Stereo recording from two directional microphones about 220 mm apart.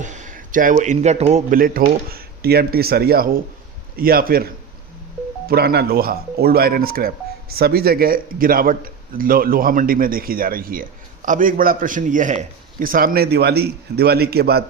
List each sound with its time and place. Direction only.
0.0 s a man's voice: 35° right (ahead or behind)
5.5 s a man's voice: 45° right (ahead or behind)